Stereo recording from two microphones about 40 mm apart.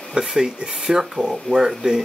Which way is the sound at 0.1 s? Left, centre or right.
Centre.